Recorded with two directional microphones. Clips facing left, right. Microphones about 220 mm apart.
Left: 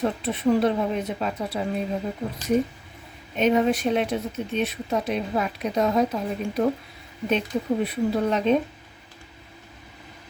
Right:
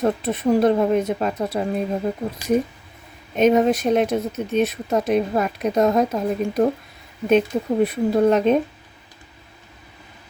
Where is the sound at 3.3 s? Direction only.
45° right (ahead or behind).